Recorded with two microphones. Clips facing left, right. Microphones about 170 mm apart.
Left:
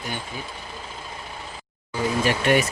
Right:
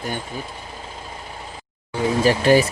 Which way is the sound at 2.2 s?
35° right (ahead or behind).